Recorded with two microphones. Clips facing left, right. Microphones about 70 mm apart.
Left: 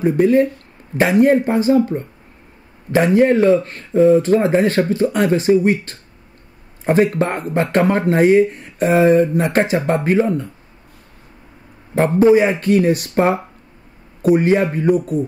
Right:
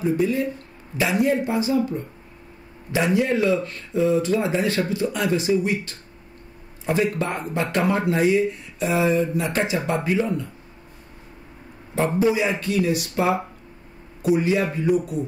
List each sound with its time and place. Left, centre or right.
0.0 s speech: left
12.2 s speech: left